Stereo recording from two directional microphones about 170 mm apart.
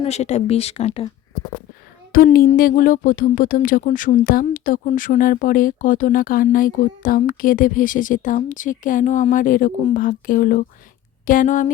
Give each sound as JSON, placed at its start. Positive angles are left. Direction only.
{"t": 0.0, "sound": "speech", "side_deg": 40}
{"t": 2.1, "sound": "speech", "side_deg": 60}